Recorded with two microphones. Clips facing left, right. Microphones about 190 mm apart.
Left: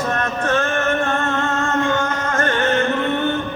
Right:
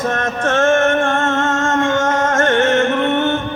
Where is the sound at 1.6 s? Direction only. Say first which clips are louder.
Right 2 dB; 90° right.